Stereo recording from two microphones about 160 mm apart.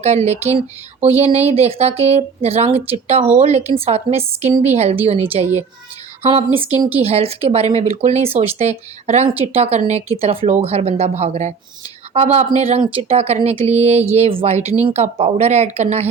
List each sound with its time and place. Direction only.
0.0 s a woman's voice: 45° right (ahead or behind)